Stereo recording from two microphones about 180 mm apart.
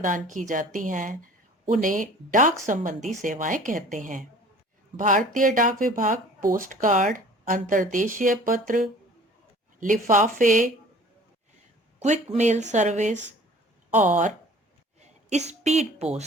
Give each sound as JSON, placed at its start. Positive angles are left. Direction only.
{"t": 0.0, "sound": "speech", "side_deg": -45}
{"t": 12.0, "sound": "speech", "side_deg": -40}